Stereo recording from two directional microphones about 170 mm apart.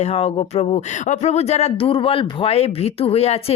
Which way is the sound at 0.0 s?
35° left (ahead or behind).